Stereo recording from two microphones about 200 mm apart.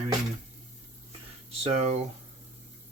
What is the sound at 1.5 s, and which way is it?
Speech, 30° right (ahead or behind).